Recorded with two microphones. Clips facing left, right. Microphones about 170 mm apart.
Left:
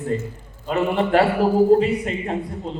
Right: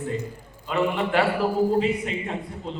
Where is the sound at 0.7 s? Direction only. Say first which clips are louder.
Left 4 dB; 40° left (ahead or behind).